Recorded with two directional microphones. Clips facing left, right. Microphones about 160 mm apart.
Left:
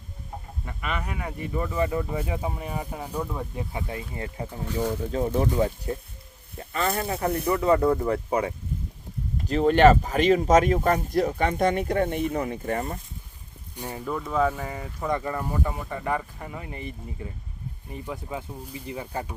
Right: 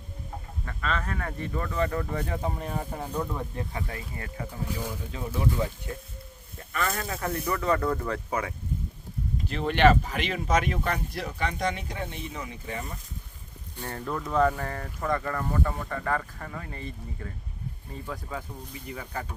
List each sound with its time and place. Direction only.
0.6 s speech: 15° left (ahead or behind)
4.9 s speech: 45° left (ahead or behind); by 8.5 s 30° left (ahead or behind)
9.5 s speech: 40° left (ahead or behind)
13.7 s speech: 10° left (ahead or behind)